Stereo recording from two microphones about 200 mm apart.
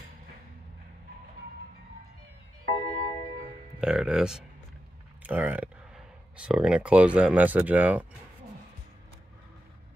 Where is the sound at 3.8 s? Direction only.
5° right (ahead or behind).